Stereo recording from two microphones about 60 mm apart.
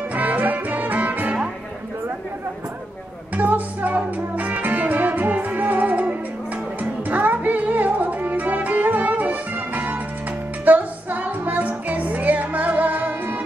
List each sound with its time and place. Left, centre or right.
0.1 s music: right
3.3 s music: right